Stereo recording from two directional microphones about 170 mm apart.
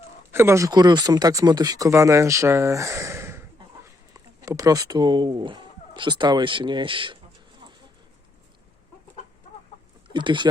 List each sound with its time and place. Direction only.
0.3 s speech: 15° right (ahead or behind); by 7.2 s 30° right (ahead or behind)
10.1 s speech: 30° right (ahead or behind)